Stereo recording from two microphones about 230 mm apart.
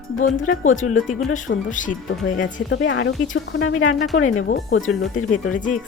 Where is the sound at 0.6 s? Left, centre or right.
Left.